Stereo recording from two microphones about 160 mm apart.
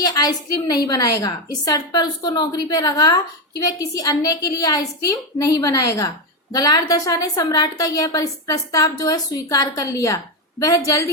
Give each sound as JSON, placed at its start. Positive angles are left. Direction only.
{"t": 0.0, "sound": "a woman's voice", "side_deg": 25}